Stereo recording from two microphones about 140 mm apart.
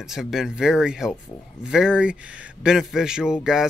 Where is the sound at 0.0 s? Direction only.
5° right (ahead or behind).